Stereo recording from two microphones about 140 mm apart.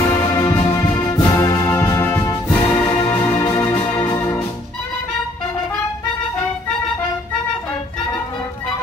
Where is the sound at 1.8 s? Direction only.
15° left (ahead or behind).